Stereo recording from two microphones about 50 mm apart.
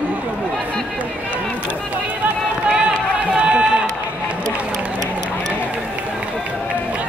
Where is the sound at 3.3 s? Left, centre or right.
Centre.